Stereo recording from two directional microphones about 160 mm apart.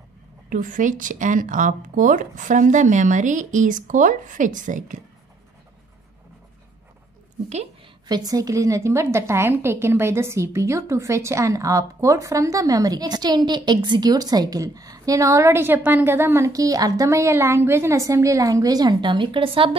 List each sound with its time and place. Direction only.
0.5 s a woman's voice: 55° right (ahead or behind)
8.1 s a woman's voice: 25° right (ahead or behind)